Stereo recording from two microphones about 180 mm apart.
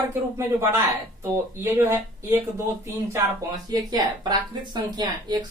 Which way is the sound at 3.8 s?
20° right (ahead or behind).